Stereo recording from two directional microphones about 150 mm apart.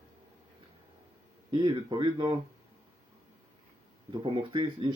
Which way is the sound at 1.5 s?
30° right (ahead or behind).